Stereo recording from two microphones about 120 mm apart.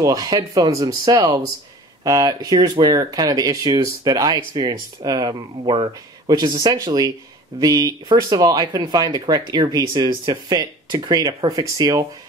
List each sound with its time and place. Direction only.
0.0 s speech: 30° right (ahead or behind)